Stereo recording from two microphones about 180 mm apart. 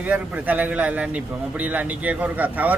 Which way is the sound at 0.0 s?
10° right (ahead or behind).